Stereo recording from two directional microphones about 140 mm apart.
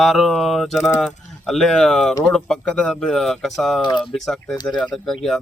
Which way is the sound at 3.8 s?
30° left (ahead or behind).